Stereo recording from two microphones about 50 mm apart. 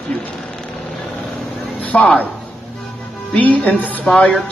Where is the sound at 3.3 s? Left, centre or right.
Left.